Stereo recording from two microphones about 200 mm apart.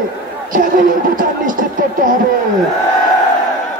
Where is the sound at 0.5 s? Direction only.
45° right (ahead or behind).